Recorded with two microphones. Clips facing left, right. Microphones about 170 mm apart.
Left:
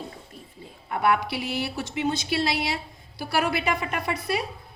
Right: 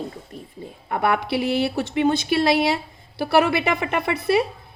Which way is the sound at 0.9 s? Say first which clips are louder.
Right 2 dB; 60° right (ahead or behind).